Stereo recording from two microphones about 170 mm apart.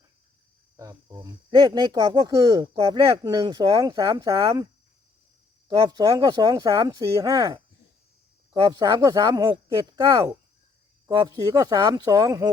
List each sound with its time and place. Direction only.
0.8 s speech: 20° right (ahead or behind)
8.6 s speech: 25° right (ahead or behind)